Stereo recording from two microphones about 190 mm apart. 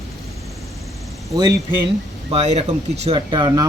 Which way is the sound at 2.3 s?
35° right (ahead or behind).